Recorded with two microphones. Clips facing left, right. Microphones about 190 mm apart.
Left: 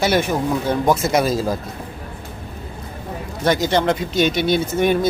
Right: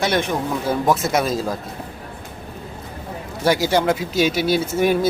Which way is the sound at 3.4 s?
10° right (ahead or behind).